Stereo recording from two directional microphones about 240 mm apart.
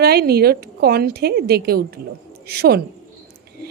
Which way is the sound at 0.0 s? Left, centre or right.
Right.